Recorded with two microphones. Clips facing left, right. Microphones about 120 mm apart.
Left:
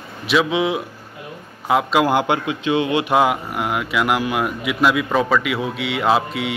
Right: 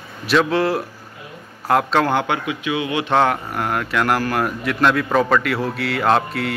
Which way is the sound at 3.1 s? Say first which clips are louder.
Right 2 dB; 5° left (ahead or behind).